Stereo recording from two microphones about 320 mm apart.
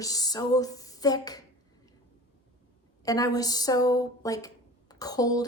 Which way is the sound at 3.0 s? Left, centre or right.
Centre.